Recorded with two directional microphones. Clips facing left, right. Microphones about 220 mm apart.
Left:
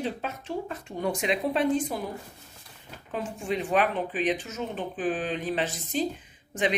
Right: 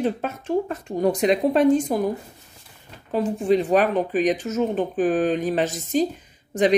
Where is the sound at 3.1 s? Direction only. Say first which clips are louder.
Right 11 dB; 35° right (ahead or behind).